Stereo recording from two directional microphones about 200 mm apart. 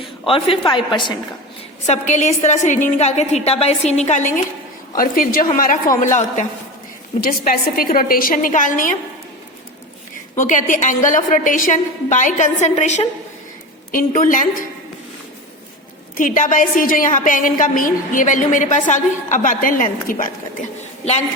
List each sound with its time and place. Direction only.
0.0 s a woman's voice: 25° left (ahead or behind)
1.9 s a woman's voice: 35° left (ahead or behind)
7.2 s a woman's voice: 50° left (ahead or behind)
10.3 s a woman's voice: 40° left (ahead or behind)
16.1 s a woman's voice: 40° left (ahead or behind)